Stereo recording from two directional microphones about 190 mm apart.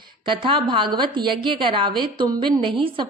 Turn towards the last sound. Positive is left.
turn(degrees=-25)  # may be behind; listen again after turning